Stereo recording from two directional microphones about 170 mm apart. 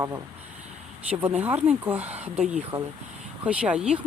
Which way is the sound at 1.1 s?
10° right (ahead or behind).